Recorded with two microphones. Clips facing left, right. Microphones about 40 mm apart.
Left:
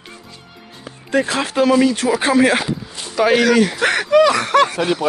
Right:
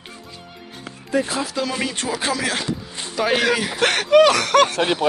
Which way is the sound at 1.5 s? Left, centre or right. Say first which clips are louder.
Left 10 dB; left.